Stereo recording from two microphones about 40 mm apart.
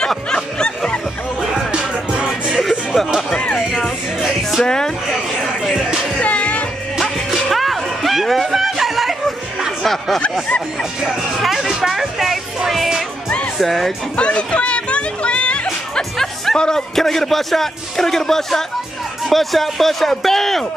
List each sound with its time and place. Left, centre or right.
0.3 s snicker: left
1.7 s music: right
3.3 s music: left
4.2 s music: centre
4.6 s a man's voice: centre
5.6 s music: centre
6.1 s music: left
7.0 s music: centre
9.8 s a man's voice: centre
10.8 s a man's voice: centre
12.7 s music: centre
13.6 s a man's voice: centre
14.1 s music: left
15.9 s a man's voice: centre